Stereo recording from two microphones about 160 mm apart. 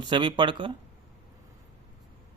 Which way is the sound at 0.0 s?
30° right (ahead or behind).